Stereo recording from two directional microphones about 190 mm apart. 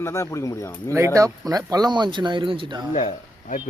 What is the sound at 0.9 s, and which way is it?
Speech, 15° right (ahead or behind).